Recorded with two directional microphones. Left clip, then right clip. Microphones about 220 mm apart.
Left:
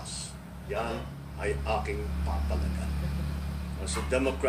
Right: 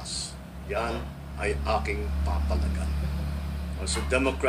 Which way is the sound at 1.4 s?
25° right (ahead or behind).